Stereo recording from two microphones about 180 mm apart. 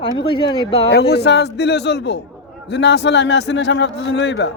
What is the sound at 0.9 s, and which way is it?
A man's voice, 65° left (ahead or behind).